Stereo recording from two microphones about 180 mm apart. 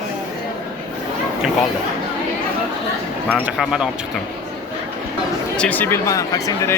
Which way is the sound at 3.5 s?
5° right (ahead or behind).